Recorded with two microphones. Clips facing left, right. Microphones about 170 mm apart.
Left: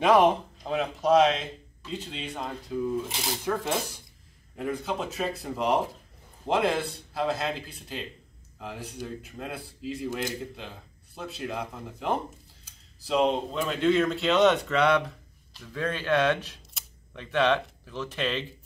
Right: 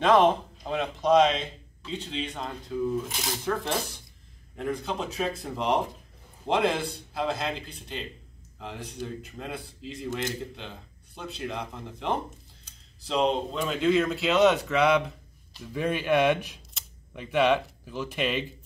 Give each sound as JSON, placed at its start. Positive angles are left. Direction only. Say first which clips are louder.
{"t": 0.0, "sound": "speech", "louder": "even", "side_deg": 10}